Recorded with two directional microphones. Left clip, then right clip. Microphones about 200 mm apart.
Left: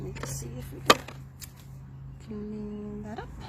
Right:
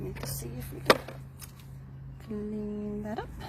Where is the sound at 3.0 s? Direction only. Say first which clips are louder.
Right 3 dB; 25° right (ahead or behind).